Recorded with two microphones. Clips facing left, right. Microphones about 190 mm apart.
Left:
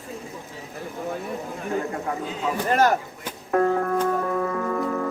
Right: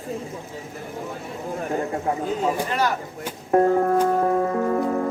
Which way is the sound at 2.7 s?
45° left (ahead or behind).